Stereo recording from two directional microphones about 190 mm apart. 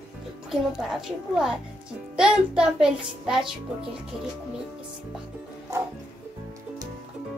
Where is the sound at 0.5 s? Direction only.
5° right (ahead or behind).